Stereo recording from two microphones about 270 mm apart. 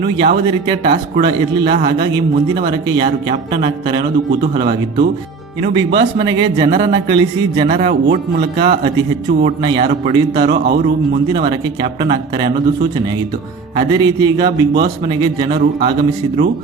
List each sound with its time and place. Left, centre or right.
0.2 s a man's voice: right
10.5 s speech: right
11.3 s a man's voice: centre
13.7 s a man's voice: centre